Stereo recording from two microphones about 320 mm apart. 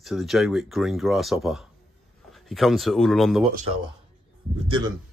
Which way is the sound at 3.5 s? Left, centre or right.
Centre.